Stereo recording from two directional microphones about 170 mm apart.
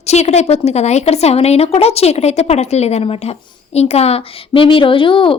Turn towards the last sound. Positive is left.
turn(degrees=30)  # may be behind; listen again after turning